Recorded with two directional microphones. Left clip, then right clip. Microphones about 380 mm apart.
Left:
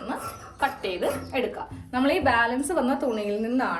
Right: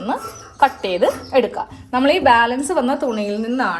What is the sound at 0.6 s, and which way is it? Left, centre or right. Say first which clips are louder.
A woman's voice: right 11 dB; centre.